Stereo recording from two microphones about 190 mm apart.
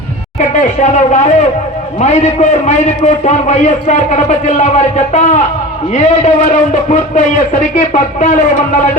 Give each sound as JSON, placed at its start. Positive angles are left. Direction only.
{"t": 0.3, "sound": "a man's voice", "side_deg": 40}